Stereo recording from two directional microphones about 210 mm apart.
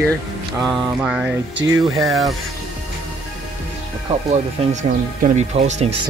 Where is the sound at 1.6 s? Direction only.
60° right (ahead or behind).